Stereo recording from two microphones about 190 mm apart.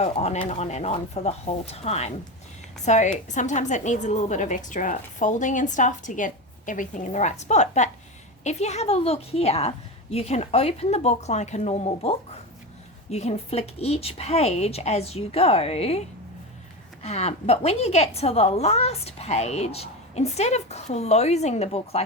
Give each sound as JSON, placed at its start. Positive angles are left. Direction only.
{"t": 0.0, "sound": "a woman's voice", "side_deg": 35}